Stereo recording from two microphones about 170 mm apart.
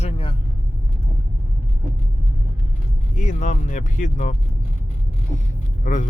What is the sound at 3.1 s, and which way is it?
Speech, 45° left (ahead or behind).